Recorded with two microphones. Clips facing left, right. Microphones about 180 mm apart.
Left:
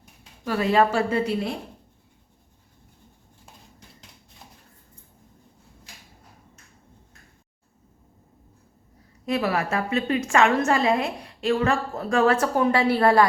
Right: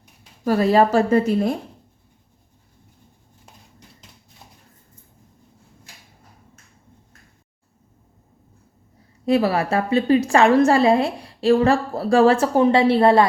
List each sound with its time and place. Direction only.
0.4 s a woman's voice: 40° right (ahead or behind)
9.2 s a woman's voice: 30° right (ahead or behind)